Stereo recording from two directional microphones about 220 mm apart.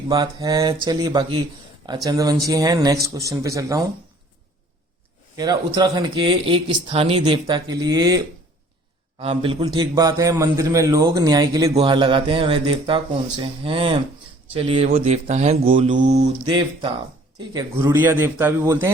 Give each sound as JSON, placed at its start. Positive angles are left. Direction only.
{"t": 0.1, "sound": "a man's voice", "side_deg": -15}
{"t": 5.4, "sound": "a man's voice", "side_deg": -20}